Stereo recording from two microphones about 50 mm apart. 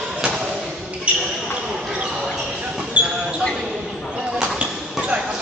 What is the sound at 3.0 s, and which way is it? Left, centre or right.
Basketball bounce, right.